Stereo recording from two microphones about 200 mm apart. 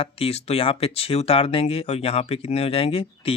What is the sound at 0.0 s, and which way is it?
Speech, 30° left (ahead or behind).